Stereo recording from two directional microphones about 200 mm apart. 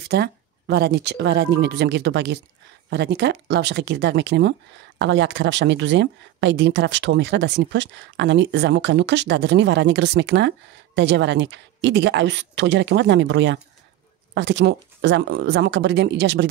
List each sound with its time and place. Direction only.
0.0 s speech: 55° right (ahead or behind)